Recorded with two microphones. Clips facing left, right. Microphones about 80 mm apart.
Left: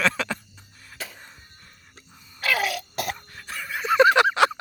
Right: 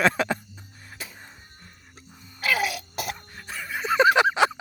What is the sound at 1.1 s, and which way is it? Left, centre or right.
Music, right.